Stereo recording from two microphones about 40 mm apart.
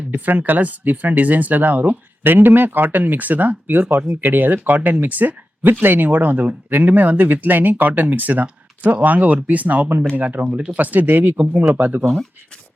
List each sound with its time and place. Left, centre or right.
0.1 s speech: right
2.2 s speech: right
6.7 s speech: right
10.5 s speech: right
10.8 s speech: right
11.3 s speech: right
11.7 s speech: right